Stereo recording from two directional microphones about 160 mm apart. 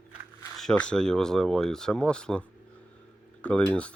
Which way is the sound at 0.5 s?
5° left (ahead or behind).